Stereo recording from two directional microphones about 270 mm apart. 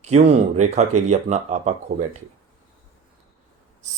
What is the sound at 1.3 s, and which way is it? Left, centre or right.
Speech, right.